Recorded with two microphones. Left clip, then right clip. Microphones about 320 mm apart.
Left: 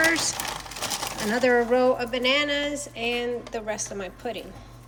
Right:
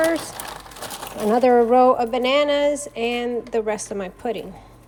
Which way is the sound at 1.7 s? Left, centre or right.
Centre.